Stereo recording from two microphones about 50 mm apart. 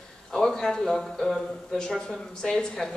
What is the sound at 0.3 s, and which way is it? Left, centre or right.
A man's voice, centre.